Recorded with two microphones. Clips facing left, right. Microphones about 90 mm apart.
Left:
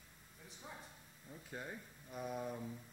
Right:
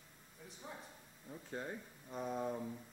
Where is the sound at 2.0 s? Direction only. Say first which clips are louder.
Right 3 dB; 30° right (ahead or behind).